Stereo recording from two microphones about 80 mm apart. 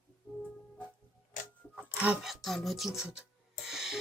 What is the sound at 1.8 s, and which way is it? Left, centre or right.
Music, centre.